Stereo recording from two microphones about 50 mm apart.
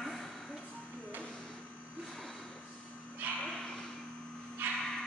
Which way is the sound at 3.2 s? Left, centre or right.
Right.